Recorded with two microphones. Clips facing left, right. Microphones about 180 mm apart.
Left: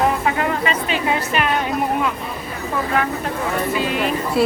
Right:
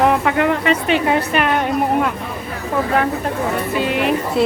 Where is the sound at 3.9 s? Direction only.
60° right (ahead or behind).